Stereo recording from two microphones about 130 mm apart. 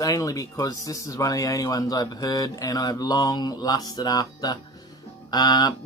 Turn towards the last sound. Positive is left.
turn(degrees=30)  # may be behind; listen again after turning